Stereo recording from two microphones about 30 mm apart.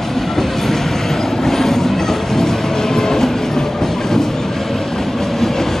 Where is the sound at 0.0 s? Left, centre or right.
Centre.